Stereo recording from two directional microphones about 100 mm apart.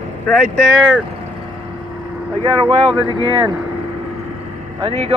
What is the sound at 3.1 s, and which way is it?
Speech, 45° right (ahead or behind).